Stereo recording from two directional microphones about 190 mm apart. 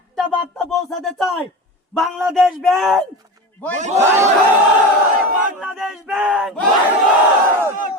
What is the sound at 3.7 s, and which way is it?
Speech, 40° right (ahead or behind).